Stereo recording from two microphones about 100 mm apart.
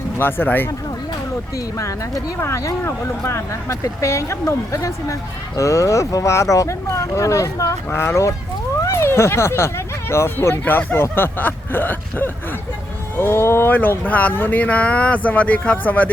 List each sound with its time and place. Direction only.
0.2 s speech: 20° left (ahead or behind)
1.5 s speech: 35° left (ahead or behind); by 16.0 s 15° left (ahead or behind)